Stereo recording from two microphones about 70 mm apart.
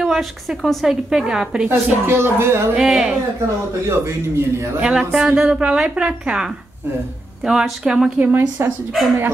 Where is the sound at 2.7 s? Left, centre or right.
Centre.